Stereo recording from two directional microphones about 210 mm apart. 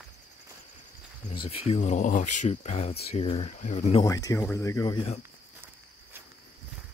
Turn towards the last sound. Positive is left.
turn(degrees=25)  # may be behind; listen again after turning